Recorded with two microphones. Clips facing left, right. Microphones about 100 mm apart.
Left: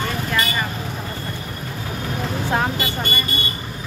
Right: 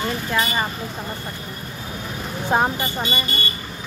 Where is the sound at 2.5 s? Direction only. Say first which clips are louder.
Right 3 dB; 25° right (ahead or behind).